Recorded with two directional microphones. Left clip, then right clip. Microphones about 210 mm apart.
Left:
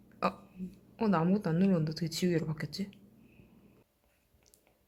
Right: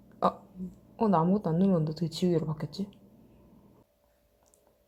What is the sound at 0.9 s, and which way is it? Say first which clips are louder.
A woman's voice: right 4 dB; 15° right (ahead or behind).